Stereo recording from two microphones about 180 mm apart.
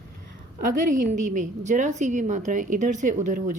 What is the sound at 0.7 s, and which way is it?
A woman's voice, 45° right (ahead or behind).